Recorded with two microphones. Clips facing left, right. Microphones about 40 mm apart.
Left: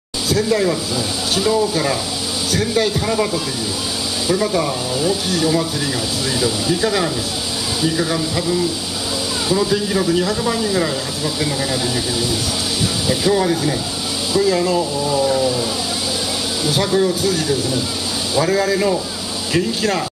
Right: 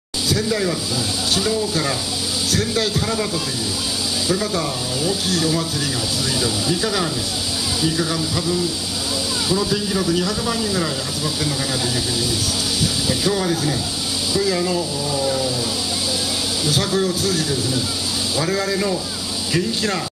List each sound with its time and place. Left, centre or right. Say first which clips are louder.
0.3 s speech: left 4 dB; centre
2.5 s speech: left 4 dB; centre
4.3 s speech: left 5 dB; centre
13.1 s speech: left 5 dB; centre
16.6 s a man's voice: left 4 dB; centre